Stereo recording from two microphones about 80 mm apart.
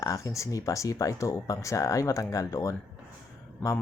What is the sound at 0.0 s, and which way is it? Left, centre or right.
Speech, left.